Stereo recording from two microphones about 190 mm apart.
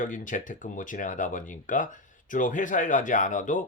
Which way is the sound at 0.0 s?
45° left (ahead or behind).